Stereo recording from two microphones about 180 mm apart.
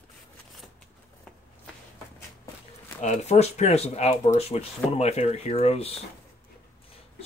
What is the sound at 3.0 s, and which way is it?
Speech, 40° left (ahead or behind).